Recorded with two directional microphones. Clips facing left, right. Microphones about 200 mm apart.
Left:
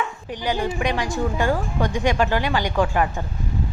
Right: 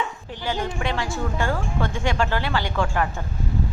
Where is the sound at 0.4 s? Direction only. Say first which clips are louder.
Left 3 dB; 10° left (ahead or behind).